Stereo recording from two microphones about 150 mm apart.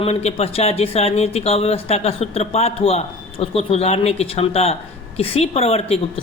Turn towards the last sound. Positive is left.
turn(degrees=40)  # may be behind; listen again after turning